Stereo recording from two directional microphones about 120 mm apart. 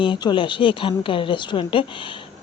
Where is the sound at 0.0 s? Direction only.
40° left (ahead or behind).